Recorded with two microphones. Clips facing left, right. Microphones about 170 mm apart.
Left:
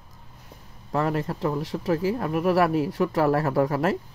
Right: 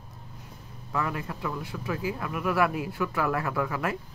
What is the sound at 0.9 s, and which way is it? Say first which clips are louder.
Speech: left 6 dB; 40° left (ahead or behind).